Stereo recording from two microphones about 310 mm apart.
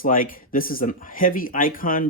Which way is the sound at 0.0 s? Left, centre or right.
Left.